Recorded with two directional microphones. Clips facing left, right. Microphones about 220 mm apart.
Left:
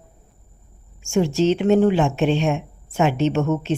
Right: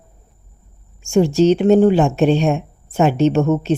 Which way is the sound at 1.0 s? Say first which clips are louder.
Right 5 dB; 35° right (ahead or behind).